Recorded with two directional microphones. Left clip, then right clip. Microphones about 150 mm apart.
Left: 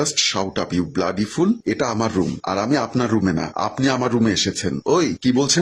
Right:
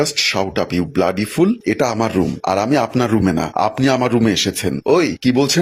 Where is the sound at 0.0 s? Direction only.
10° right (ahead or behind).